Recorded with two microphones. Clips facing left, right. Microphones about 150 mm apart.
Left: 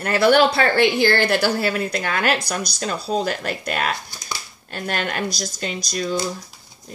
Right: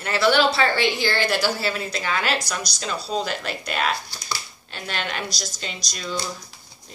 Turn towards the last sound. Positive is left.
turn(degrees=50)  # may be behind; listen again after turning